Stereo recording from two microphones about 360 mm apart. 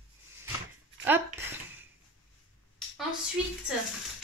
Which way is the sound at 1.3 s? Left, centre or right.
Centre.